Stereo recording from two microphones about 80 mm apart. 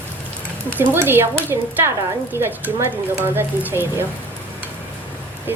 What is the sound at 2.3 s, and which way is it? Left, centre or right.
A woman's voice, right.